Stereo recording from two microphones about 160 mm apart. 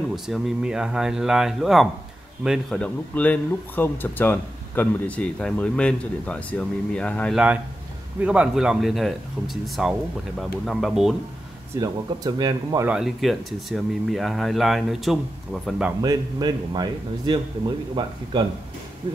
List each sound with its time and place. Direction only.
0.1 s speech: centre (ahead or behind)
2.8 s speech: 10° left (ahead or behind)
8.2 s speech: 5° right (ahead or behind)
11.8 s speech: 25° right (ahead or behind)
12.8 s speech: 5° right (ahead or behind)
16.0 s speech: 25° right (ahead or behind)
18.0 s speech: 30° right (ahead or behind)